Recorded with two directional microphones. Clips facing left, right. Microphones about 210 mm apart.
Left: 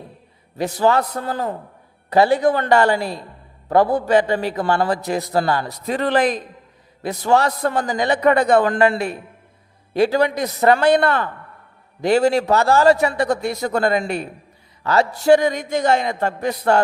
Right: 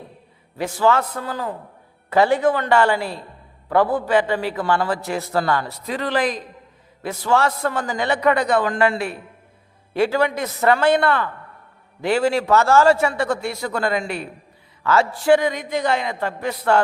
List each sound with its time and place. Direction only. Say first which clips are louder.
0.5 s a man's voice: left 1 dB; 40° left (ahead or behind)
5.8 s a man's voice: left 6 dB; 50° left (ahead or behind)